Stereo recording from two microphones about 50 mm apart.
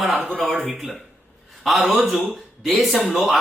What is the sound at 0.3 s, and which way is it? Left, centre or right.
A man's voice, centre.